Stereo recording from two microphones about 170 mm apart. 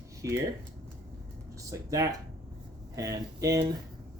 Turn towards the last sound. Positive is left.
turn(degrees=-20)  # may be behind; listen again after turning